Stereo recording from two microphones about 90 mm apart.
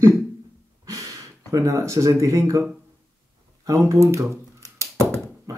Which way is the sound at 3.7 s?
35° right (ahead or behind).